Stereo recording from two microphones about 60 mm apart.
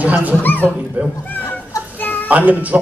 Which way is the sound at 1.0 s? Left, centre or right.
Right.